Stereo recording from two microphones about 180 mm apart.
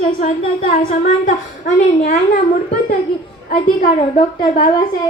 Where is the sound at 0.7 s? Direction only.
45° left (ahead or behind).